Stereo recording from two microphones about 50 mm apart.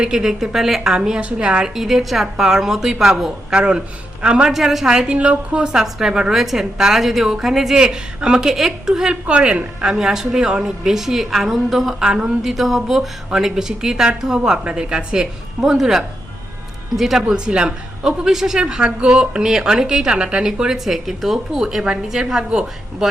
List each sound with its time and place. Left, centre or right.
0.0 s a woman's voice: centre
4.4 s a woman's voice: centre
5.1 s a woman's voice: right
5.6 s a woman's voice: centre
9.2 s a woman's voice: right; by 11.9 s centre
11.9 s a woman's voice: centre
17.3 s a woman's voice: centre